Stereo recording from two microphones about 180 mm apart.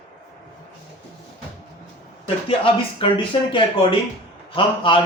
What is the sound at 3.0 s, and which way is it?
A man's voice, 25° left (ahead or behind).